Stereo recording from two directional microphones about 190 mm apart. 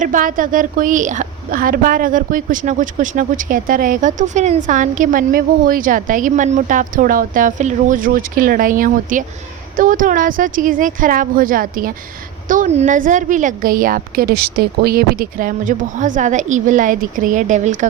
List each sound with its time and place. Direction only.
0.0 s a woman's voice: 45° right (ahead or behind)